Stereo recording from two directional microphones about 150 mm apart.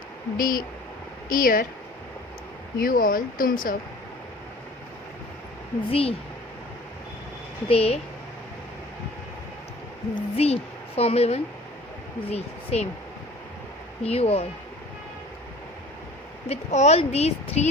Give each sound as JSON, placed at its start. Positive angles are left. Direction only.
{"t": 0.3, "sound": "speech", "side_deg": 65}
{"t": 2.7, "sound": "speech", "side_deg": 70}
{"t": 5.9, "sound": "a woman's voice", "side_deg": 40}
{"t": 7.7, "sound": "a woman's voice", "side_deg": 40}
{"t": 10.2, "sound": "a woman's voice", "side_deg": 45}
{"t": 14.0, "sound": "a woman's voice", "side_deg": 40}
{"t": 16.5, "sound": "speech", "side_deg": 45}